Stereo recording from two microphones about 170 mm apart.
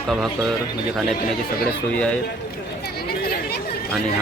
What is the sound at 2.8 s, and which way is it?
Chatter, 65° left (ahead or behind).